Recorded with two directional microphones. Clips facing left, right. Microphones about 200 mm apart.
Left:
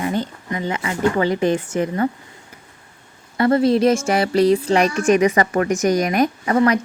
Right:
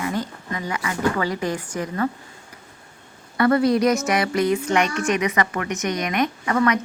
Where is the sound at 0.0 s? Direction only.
25° left (ahead or behind).